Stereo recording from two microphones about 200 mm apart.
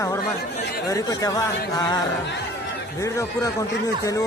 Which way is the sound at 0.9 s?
15° left (ahead or behind).